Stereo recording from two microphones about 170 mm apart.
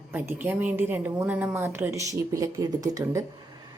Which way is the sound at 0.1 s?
10° right (ahead or behind).